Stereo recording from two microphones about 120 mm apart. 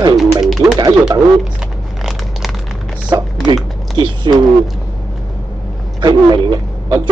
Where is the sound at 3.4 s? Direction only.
35° right (ahead or behind).